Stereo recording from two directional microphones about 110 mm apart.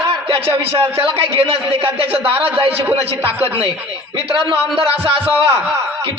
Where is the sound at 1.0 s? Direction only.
60° right (ahead or behind).